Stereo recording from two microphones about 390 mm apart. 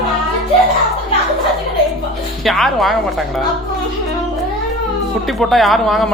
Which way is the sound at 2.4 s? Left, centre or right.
Centre.